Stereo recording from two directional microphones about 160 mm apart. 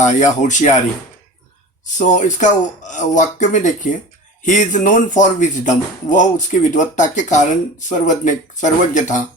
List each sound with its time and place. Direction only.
0.0 s speech: 50° left (ahead or behind)
2.0 s speech: 50° left (ahead or behind)